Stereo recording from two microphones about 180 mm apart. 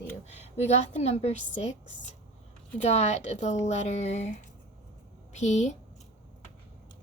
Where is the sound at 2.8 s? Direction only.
40° left (ahead or behind).